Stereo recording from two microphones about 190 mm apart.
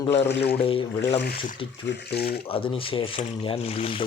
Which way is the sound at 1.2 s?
55° left (ahead or behind).